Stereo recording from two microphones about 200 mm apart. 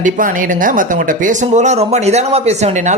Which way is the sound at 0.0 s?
40° right (ahead or behind).